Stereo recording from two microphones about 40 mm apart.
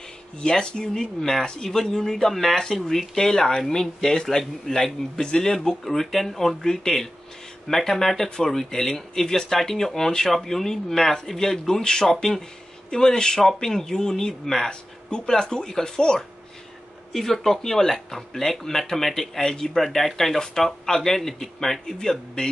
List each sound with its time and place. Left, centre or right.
0.4 s speech: left
14.7 s speech: left
17.1 s speech: centre